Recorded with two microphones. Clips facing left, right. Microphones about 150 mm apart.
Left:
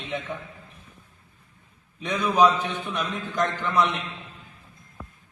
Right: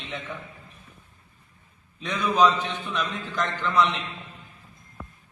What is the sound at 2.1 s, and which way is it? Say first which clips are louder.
A man's voice: left 1 dB; 15° left (ahead or behind).